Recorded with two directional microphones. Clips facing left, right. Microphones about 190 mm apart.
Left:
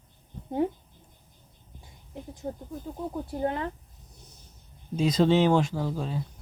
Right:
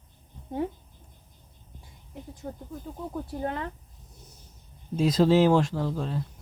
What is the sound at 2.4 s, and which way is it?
Speech, 15° left (ahead or behind).